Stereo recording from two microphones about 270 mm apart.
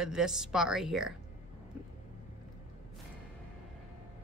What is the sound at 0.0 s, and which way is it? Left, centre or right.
Speech, centre.